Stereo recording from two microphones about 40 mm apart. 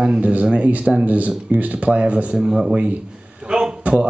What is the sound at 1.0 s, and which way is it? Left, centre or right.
Speech, right.